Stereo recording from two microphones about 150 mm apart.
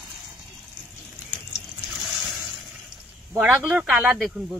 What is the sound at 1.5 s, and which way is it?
Water, centre (ahead or behind).